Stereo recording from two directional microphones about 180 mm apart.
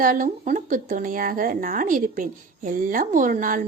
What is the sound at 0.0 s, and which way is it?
Speech, 50° right (ahead or behind).